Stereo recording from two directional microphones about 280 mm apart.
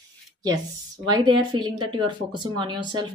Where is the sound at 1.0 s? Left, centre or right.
Centre.